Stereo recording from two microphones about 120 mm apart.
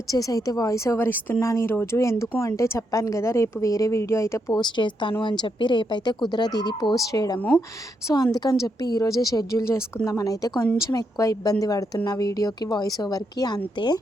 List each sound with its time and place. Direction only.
0.1 s a woman's voice: 30° left (ahead or behind)
4.6 s a woman's voice: 40° left (ahead or behind)